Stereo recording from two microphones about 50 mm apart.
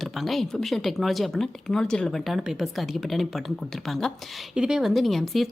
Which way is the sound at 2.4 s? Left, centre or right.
Centre.